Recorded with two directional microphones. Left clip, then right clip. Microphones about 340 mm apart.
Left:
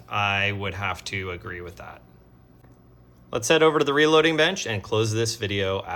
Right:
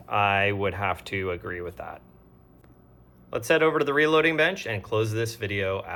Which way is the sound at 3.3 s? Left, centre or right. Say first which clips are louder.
Left 3 dB; centre.